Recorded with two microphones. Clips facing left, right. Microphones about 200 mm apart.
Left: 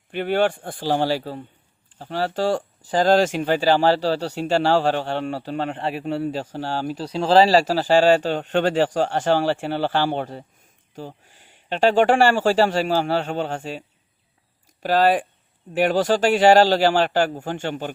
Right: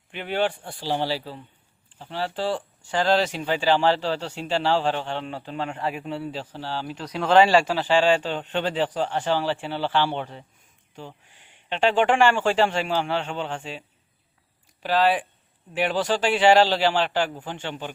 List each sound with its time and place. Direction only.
0.1 s speech: 50° left (ahead or behind)
7.0 s speech: 30° left (ahead or behind); by 17.9 s 45° left (ahead or behind)